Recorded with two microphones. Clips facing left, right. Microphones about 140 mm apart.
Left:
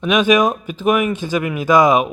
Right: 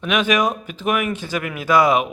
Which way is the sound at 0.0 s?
15° left (ahead or behind).